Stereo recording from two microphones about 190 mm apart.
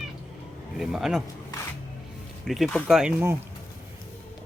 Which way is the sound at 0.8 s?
Centre (ahead or behind).